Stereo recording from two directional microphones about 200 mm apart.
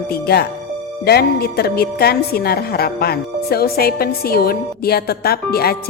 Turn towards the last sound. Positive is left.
turn(degrees=50)  # may be behind; listen again after turning